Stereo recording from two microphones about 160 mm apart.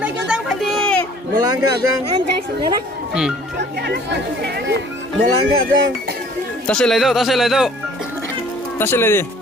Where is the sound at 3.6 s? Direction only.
90° right.